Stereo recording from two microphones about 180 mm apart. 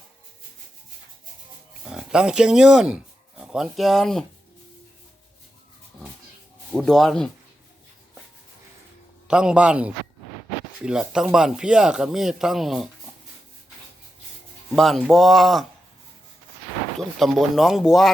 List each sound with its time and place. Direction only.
1.9 s speech: 5° right (ahead or behind)
6.7 s speech: centre (ahead or behind)
9.2 s speech: 5° right (ahead or behind)
14.7 s speech: centre (ahead or behind)
17.0 s speech: centre (ahead or behind)